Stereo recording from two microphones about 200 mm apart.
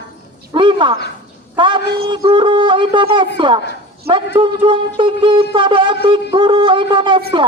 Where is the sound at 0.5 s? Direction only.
25° right (ahead or behind).